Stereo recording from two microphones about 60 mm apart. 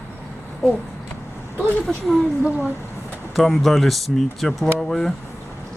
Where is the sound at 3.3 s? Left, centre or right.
Centre.